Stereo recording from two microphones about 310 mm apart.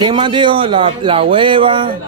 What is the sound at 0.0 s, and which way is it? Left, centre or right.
Speech, centre.